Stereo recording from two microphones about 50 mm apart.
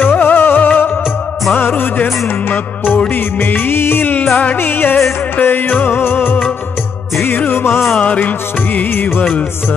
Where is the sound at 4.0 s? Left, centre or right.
Left.